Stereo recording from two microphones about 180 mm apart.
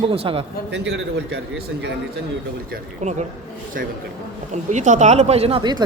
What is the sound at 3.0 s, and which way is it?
Speech, 40° right (ahead or behind).